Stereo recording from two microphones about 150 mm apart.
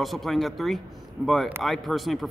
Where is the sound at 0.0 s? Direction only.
Centre (ahead or behind).